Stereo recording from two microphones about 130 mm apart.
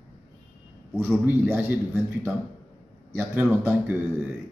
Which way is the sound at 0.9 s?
15° right (ahead or behind).